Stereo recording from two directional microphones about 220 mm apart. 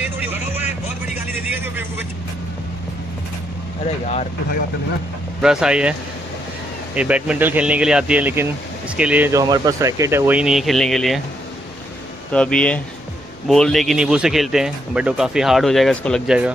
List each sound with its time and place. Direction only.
0.0 s vehicle: 10° right (ahead or behind)
3.8 s speech: 30° left (ahead or behind)
5.4 s speech: 5° right (ahead or behind)
7.0 s speech: 5° right (ahead or behind)
12.3 s speech: 5° left (ahead or behind)